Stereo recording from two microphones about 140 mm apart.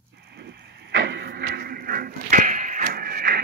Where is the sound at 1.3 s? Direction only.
90° right.